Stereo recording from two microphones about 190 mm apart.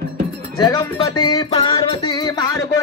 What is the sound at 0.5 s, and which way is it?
Music, 20° left (ahead or behind).